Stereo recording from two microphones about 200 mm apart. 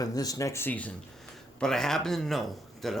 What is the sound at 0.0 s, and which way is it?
Speech, 20° left (ahead or behind).